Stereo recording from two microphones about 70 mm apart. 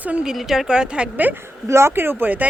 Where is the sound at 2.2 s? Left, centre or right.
Right.